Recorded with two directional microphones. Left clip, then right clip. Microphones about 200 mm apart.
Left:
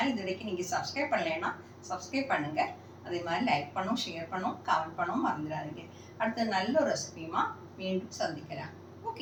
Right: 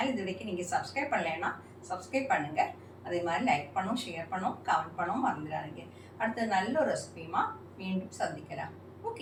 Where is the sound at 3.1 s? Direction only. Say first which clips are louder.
Right 1 dB; centre (ahead or behind).